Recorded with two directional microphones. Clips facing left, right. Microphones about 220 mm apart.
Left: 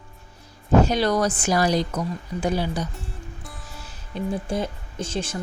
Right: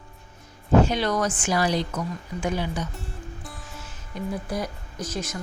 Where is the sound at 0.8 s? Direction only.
40° left (ahead or behind).